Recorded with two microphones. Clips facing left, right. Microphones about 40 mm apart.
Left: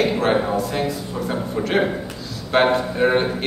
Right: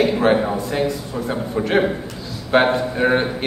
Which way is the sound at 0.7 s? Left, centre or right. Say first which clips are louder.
Right 2 dB; centre.